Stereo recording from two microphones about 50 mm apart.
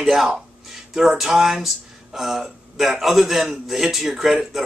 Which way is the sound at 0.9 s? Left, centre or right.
Centre.